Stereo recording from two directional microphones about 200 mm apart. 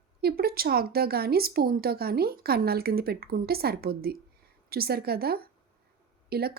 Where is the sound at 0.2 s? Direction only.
50° right (ahead or behind).